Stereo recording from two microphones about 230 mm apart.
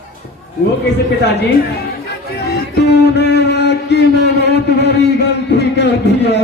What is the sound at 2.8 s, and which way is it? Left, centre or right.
Music, left.